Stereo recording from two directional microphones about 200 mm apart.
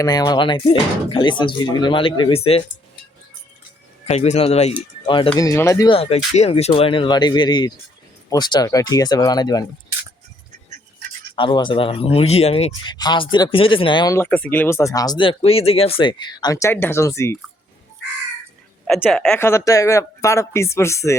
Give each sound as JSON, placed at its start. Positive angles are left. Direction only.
{"t": 0.0, "sound": "speech", "side_deg": 20}
{"t": 4.0, "sound": "a man's voice", "side_deg": 30}
{"t": 11.3, "sound": "speech", "side_deg": 25}
{"t": 18.9, "sound": "a woman's voice", "side_deg": 0}
{"t": 19.4, "sound": "speech", "side_deg": 15}